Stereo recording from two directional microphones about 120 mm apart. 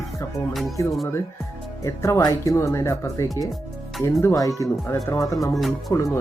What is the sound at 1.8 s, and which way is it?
Speech, 25° left (ahead or behind).